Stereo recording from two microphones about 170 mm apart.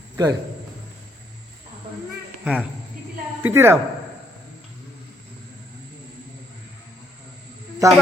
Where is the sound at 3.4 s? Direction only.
15° right (ahead or behind).